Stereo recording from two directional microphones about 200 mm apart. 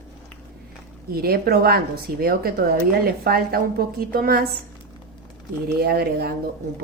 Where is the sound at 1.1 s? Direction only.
50° right (ahead or behind).